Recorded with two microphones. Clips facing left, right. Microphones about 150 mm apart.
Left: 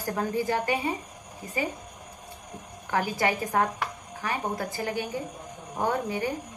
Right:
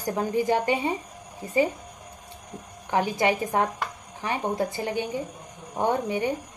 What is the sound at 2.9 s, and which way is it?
A woman's voice, 20° right (ahead or behind).